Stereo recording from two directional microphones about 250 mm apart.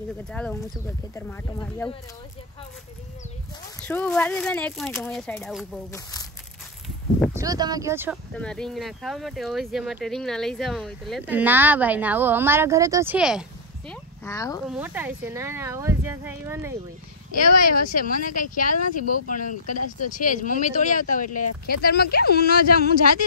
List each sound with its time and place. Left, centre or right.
0.3 s speech: centre
3.8 s speech: centre
5.9 s speech: centre
7.3 s speech: centre
8.4 s speech: centre
14.2 s speech: centre
14.7 s speech: centre
17.3 s speech: left